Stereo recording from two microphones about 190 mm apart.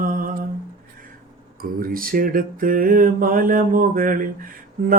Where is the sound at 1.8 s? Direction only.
50° right (ahead or behind).